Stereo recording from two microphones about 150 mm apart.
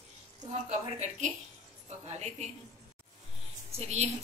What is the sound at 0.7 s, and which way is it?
A woman's voice, 50° right (ahead or behind).